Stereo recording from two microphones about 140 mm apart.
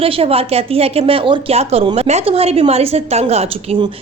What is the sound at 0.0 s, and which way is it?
A woman's voice, 45° right (ahead or behind).